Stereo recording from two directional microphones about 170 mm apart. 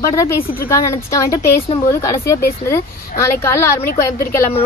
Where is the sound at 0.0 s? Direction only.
20° left (ahead or behind).